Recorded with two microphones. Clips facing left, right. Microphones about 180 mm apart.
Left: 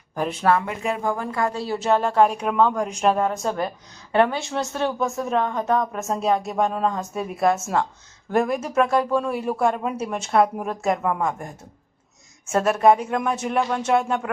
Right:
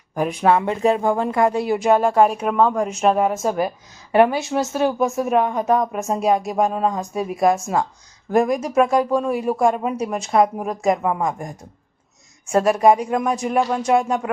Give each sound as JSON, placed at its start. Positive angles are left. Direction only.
{"t": 0.2, "sound": "speech", "side_deg": -15}
{"t": 4.9, "sound": "speech", "side_deg": -20}
{"t": 6.3, "sound": "speech", "side_deg": -5}
{"t": 12.5, "sound": "speech", "side_deg": 0}
{"t": 12.7, "sound": "speech", "side_deg": -10}
{"t": 13.3, "sound": "speech", "side_deg": 5}
{"t": 13.6, "sound": "speech", "side_deg": -15}